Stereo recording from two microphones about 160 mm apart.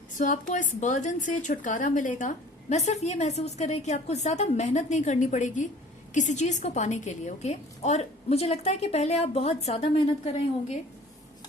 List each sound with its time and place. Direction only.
0.2 s a woman's voice: 50° left (ahead or behind)